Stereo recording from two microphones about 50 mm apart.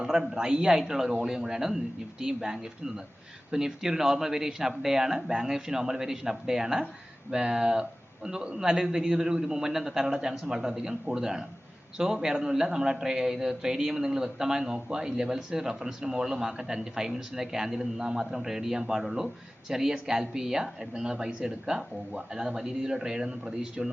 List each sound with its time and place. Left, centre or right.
0.0 s a man's voice: centre